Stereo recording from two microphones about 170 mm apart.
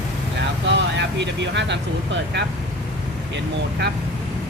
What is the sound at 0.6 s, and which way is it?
Speech, 90° right.